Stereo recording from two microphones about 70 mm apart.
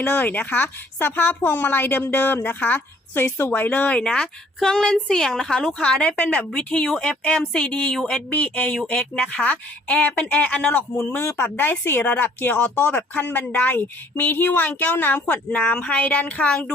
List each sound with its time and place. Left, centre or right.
0.0 s speech: left; by 16.7 s centre